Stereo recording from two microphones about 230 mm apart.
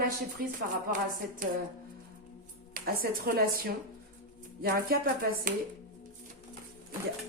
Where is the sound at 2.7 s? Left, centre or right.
Right.